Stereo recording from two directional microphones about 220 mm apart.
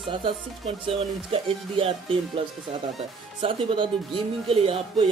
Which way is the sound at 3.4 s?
25° right (ahead or behind).